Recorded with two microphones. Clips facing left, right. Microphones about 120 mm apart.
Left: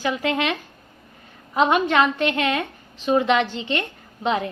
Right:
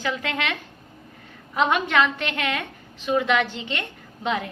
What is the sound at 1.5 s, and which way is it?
A woman's voice, 20° left (ahead or behind).